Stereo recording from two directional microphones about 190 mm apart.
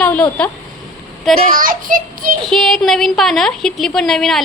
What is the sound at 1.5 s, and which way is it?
Speech, 45° right (ahead or behind).